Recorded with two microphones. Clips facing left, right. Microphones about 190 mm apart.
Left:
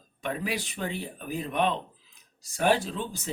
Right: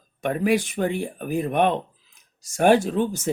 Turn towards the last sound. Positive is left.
turn(degrees=-50)  # may be behind; listen again after turning